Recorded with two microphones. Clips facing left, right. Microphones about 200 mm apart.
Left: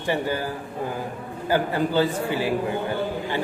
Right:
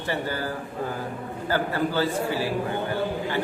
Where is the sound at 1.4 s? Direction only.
15° left (ahead or behind).